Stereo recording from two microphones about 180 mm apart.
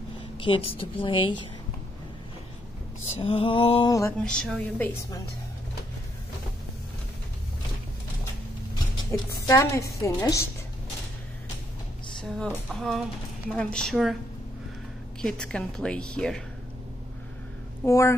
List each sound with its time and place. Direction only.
0.4 s music: 30° left (ahead or behind)
3.2 s music: 30° left (ahead or behind)
4.2 s a woman's voice: 5° left (ahead or behind)
9.1 s a woman's voice: 15° left (ahead or behind)
12.4 s a woman's voice: centre (ahead or behind)
15.2 s a woman's voice: 5° left (ahead or behind)
17.8 s a woman's voice: 15° left (ahead or behind)